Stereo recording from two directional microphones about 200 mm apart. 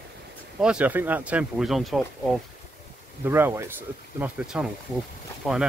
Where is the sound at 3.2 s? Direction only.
10° right (ahead or behind).